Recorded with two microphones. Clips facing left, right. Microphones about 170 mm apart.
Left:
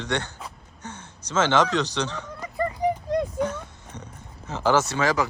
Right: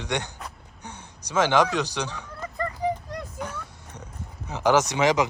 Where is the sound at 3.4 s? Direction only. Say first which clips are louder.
Left 8 dB; 10° right (ahead or behind).